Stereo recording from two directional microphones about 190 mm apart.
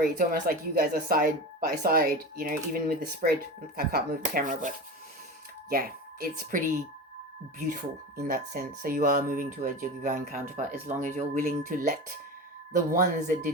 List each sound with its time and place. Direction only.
0.0 s speech: 45° right (ahead or behind)
7.7 s speech: 50° right (ahead or behind)